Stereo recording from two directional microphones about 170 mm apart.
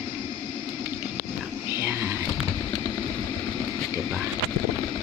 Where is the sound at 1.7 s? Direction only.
15° right (ahead or behind).